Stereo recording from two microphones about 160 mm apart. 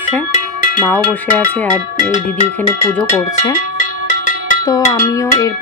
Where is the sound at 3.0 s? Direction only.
20° left (ahead or behind).